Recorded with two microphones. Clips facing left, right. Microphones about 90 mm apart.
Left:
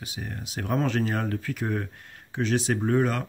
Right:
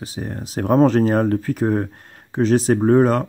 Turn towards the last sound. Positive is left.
turn(degrees=-40)  # may be behind; listen again after turning